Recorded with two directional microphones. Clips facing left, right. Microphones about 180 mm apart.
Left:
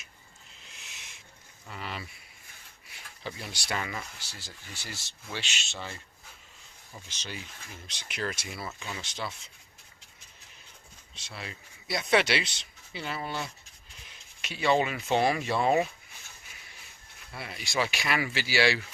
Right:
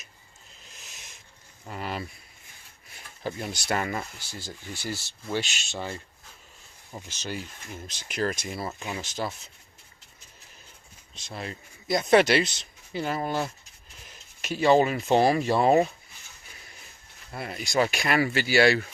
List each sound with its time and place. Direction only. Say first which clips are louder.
0.7 s owl: right 2 dB; 40° right (ahead or behind)
1.6 s a sound: right 6 dB; 45° right (ahead or behind)
3.2 s speech: right 7 dB; 50° right (ahead or behind)
11.3 s speech: right 6 dB; 40° right (ahead or behind)
17.3 s speech: right 6 dB; 50° right (ahead or behind)